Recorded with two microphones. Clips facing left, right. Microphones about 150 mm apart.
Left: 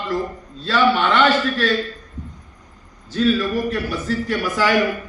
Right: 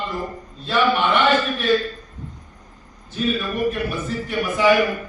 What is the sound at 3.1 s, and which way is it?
A man's voice, 90° left.